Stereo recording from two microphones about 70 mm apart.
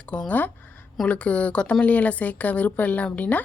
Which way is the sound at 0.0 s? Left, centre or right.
Centre.